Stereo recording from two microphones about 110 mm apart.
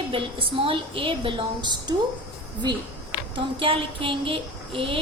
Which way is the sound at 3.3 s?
50° right (ahead or behind).